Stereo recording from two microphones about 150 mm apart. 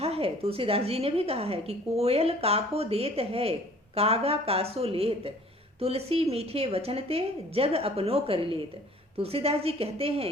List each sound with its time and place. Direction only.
0.0 s a woman's voice: 40° right (ahead or behind)